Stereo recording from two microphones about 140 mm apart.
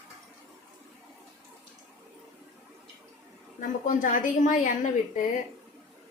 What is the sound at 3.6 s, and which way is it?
A woman's voice, 70° left (ahead or behind).